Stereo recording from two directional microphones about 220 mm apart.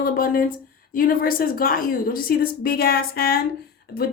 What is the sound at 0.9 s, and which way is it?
A woman's voice, 40° left (ahead or behind).